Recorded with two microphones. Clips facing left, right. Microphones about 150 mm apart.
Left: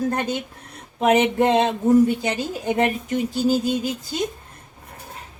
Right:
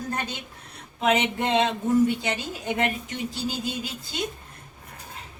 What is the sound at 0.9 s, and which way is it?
Speech, 45° left (ahead or behind).